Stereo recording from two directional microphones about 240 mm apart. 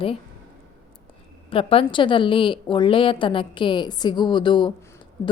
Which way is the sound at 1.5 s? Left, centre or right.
Left.